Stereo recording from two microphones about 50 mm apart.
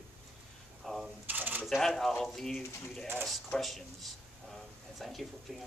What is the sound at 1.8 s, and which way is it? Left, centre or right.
Speech, centre.